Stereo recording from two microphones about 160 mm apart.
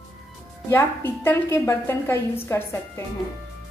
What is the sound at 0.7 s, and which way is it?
A woman's voice, 15° left (ahead or behind).